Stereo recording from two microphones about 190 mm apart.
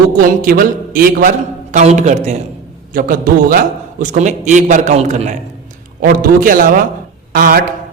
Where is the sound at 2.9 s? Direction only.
50° right (ahead or behind).